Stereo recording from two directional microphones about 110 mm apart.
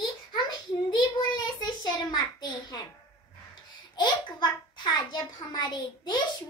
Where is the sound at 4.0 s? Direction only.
45° left (ahead or behind).